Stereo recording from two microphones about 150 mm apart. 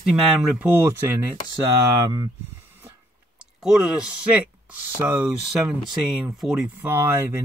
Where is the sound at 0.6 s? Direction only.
15° right (ahead or behind).